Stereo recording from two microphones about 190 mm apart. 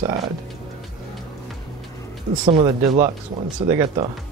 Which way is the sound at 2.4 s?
25° right (ahead or behind).